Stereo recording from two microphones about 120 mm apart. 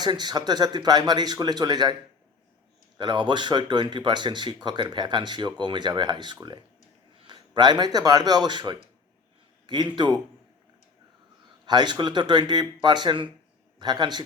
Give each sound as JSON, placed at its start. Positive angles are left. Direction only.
{"t": 0.0, "sound": "speech", "side_deg": -35}
{"t": 3.0, "sound": "a man's voice", "side_deg": -40}
{"t": 11.6, "sound": "speech", "side_deg": -35}